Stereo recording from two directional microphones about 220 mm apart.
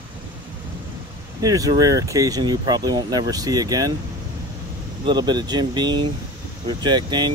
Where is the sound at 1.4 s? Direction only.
15° right (ahead or behind).